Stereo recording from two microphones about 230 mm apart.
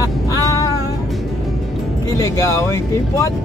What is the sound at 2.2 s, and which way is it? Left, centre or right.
Speech, centre.